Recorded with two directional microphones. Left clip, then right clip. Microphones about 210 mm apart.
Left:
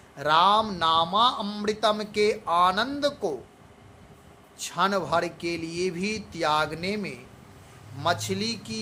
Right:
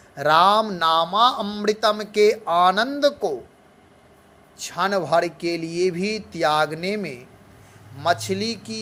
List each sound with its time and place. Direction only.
0.2 s speech: 25° right (ahead or behind)
4.5 s speech: 15° right (ahead or behind)